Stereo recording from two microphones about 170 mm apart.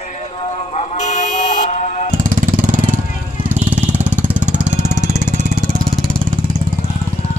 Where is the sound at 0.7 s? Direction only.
40° left (ahead or behind).